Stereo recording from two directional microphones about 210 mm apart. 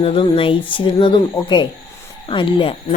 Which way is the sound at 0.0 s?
25° left (ahead or behind).